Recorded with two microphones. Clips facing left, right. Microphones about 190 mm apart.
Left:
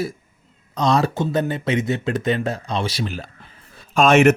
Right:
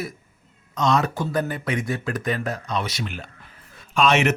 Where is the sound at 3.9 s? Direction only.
45° left (ahead or behind).